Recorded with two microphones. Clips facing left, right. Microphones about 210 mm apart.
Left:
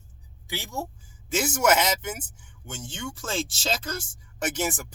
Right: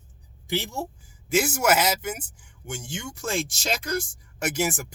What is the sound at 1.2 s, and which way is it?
Speech, 10° right (ahead or behind).